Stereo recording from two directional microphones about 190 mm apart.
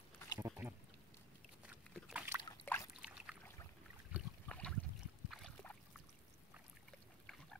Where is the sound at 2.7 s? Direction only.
10° left (ahead or behind).